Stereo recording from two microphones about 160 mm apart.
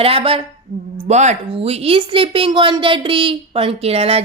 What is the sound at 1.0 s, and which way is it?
Speech, 45° right (ahead or behind).